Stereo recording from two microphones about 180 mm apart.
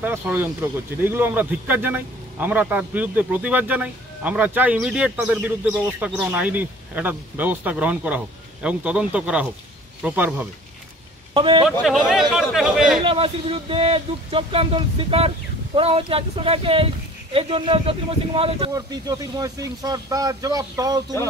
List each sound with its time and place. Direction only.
0.0 s speech: 10° right (ahead or behind)
11.3 s speech: 30° right (ahead or behind)
11.6 s speech: centre (ahead or behind)
13.0 s speech: 30° right (ahead or behind)
18.7 s speech: 20° right (ahead or behind)